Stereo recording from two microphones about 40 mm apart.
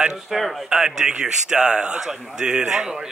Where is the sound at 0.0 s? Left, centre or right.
Centre.